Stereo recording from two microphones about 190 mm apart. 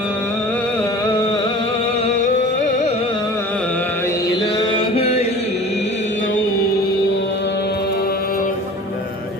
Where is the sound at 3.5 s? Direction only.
5° left (ahead or behind); by 5.5 s 35° left (ahead or behind).